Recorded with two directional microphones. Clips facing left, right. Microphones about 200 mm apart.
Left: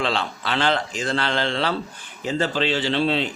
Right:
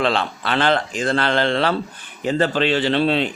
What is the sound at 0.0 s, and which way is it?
A man's voice, 55° right (ahead or behind).